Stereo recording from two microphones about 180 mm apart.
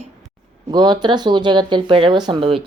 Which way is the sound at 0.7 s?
25° right (ahead or behind).